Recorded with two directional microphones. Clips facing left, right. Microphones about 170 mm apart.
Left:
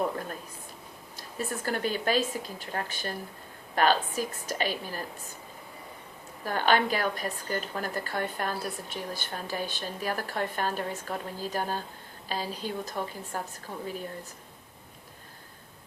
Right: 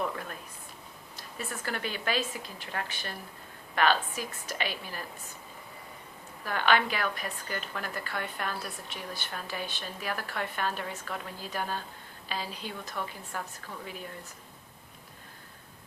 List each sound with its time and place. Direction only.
0.0 s a sound: 35° left (ahead or behind)
1.1 s a woman's voice: 40° left (ahead or behind)
6.4 s a woman's voice: 40° left (ahead or behind)